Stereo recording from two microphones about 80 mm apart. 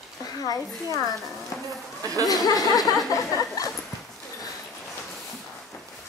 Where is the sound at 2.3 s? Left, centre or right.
Left.